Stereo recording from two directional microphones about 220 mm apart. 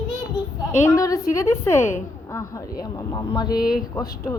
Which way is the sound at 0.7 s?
15° left (ahead or behind).